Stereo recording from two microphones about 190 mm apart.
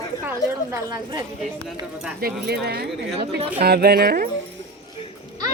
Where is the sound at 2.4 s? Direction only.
55° right (ahead or behind).